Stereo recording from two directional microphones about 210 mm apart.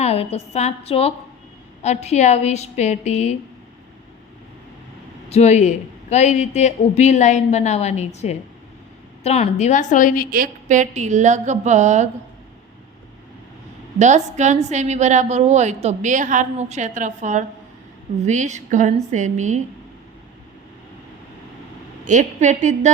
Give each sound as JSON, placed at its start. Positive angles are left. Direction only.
{"t": 0.0, "sound": "a woman's voice", "side_deg": 30}
{"t": 5.3, "sound": "a man's voice", "side_deg": 30}
{"t": 10.3, "sound": "a woman's voice", "side_deg": -40}
{"t": 14.0, "sound": "a woman's voice", "side_deg": -35}
{"t": 22.0, "sound": "a woman's voice", "side_deg": -35}